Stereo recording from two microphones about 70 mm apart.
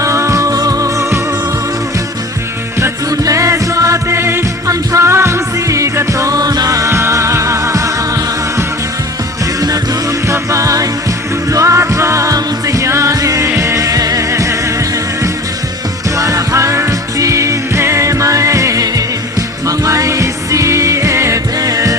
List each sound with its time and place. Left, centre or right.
0.0 s music: right
3.1 s music: right
4.7 s music: right
9.6 s music: right
16.1 s music: right